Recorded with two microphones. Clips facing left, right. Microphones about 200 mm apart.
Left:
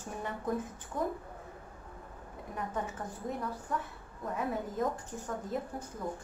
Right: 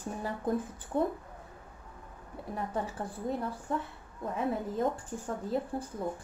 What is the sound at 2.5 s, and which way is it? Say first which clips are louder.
A woman's voice: right 2 dB; 35° right (ahead or behind).